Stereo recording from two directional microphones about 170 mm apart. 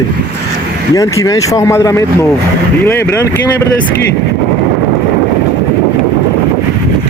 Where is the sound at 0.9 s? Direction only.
20° left (ahead or behind).